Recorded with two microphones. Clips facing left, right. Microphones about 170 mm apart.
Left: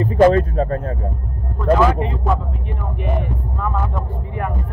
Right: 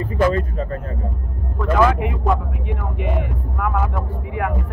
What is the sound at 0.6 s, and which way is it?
Speech, 45° left (ahead or behind).